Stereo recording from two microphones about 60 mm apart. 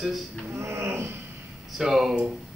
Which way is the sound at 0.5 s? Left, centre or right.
Right.